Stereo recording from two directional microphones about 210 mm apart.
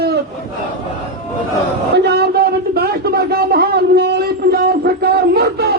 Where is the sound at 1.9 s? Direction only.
50° right (ahead or behind).